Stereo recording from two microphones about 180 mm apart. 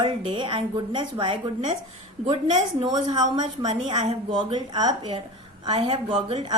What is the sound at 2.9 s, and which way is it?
Speech, 20° right (ahead or behind).